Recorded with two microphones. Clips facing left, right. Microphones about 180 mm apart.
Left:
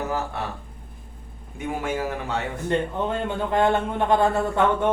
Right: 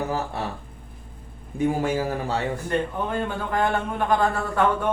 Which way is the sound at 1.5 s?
35° right (ahead or behind).